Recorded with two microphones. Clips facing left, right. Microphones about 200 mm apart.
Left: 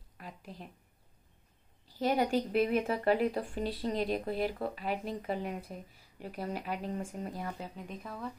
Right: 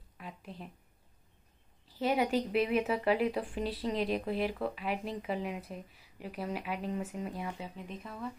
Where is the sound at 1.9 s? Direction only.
5° right (ahead or behind).